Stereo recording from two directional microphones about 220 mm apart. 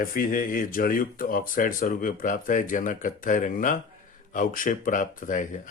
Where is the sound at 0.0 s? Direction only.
40° left (ahead or behind).